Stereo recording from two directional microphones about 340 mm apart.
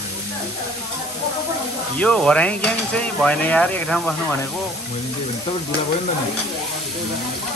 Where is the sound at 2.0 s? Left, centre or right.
Centre.